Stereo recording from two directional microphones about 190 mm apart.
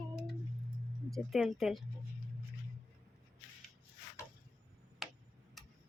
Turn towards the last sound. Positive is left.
turn(degrees=0)  # may be behind; listen again after turning